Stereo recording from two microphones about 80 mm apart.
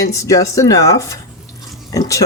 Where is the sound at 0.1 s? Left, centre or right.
Left.